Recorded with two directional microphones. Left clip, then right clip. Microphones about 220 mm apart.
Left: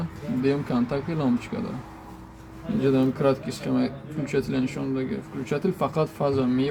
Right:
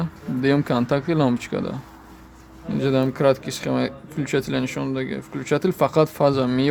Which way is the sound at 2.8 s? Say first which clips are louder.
Right 3 dB; 45° right (ahead or behind).